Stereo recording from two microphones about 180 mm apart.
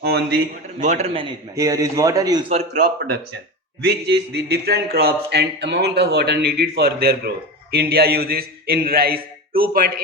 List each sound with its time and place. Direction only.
0.0 s a sound: 65° right (ahead or behind)
0.8 s a man's voice: 40° right (ahead or behind)
1.5 s a man's voice: 20° right (ahead or behind)
2.5 s a man's voice: 40° right (ahead or behind)
3.8 s speech: 70° right (ahead or behind)